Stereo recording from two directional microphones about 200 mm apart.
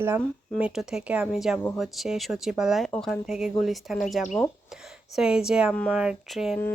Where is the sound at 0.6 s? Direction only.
5° right (ahead or behind).